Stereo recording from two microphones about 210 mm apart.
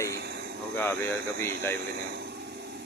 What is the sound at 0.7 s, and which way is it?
Speech, 10° left (ahead or behind).